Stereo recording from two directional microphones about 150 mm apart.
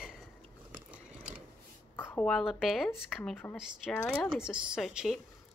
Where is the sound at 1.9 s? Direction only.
15° left (ahead or behind).